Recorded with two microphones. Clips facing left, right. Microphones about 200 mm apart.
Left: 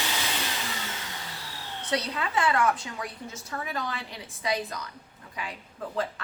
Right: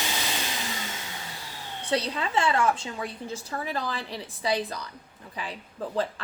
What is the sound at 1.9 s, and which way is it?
A woman's voice, 30° right (ahead or behind).